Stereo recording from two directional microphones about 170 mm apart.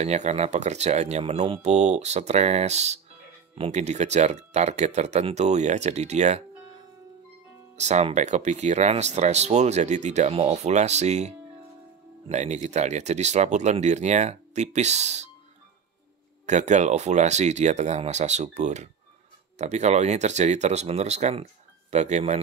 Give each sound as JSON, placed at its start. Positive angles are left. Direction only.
{"t": 0.0, "sound": "speech", "side_deg": -40}
{"t": 7.7, "sound": "speech", "side_deg": -40}
{"t": 16.4, "sound": "speech", "side_deg": -45}